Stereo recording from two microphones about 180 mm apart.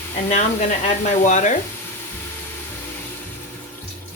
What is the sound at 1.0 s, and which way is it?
Speech, 45° left (ahead or behind).